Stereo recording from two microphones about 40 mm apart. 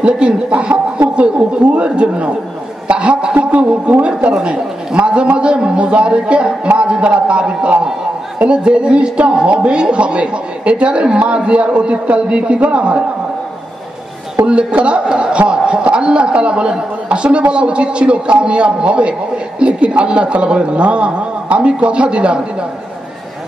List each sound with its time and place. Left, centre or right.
0.0 s a man's voice: right
3.3 s a man's voice: right
14.4 s a man's voice: right